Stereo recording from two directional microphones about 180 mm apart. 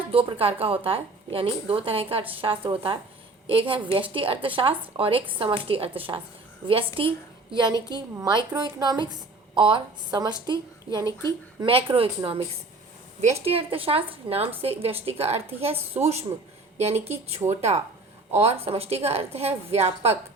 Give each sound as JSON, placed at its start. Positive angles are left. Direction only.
{"t": 0.1, "sound": "speech", "side_deg": -30}
{"t": 13.4, "sound": "speech", "side_deg": -30}